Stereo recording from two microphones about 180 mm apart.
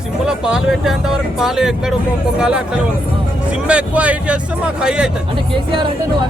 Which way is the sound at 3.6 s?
5° right (ahead or behind).